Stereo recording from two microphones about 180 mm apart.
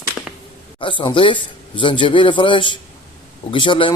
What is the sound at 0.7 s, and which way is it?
Speech, 30° left (ahead or behind).